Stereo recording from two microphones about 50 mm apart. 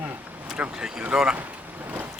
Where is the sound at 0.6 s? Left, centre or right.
Right.